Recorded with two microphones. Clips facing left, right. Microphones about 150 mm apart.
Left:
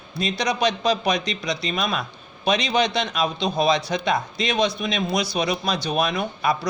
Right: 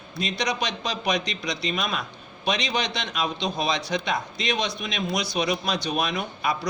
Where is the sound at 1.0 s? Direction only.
35° left (ahead or behind).